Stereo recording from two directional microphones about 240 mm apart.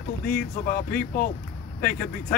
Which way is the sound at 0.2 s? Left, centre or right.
Left.